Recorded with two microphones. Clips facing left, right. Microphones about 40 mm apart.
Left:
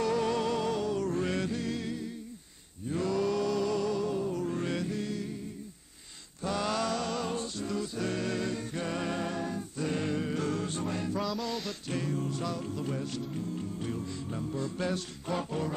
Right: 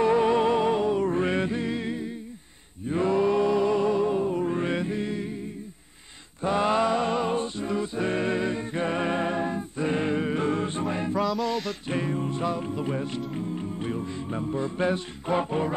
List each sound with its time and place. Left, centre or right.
0.0 s music: right
6.4 s music: right
11.1 s music: centre
11.9 s music: right